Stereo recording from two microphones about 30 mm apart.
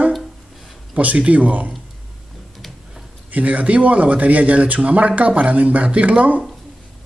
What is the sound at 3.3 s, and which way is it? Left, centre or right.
Speech, right.